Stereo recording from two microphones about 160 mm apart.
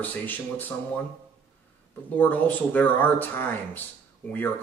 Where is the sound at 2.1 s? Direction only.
10° left (ahead or behind).